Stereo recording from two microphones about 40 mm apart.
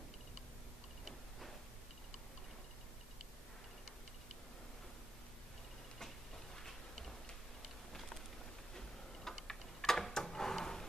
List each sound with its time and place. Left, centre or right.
8.7 s tick-tock: centre